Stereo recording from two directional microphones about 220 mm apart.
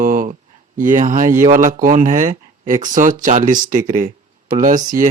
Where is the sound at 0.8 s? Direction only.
35° right (ahead or behind).